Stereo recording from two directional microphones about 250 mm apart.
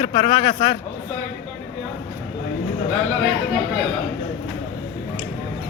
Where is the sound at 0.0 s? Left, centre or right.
Left.